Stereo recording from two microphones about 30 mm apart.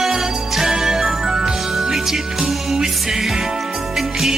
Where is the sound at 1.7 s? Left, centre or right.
Centre.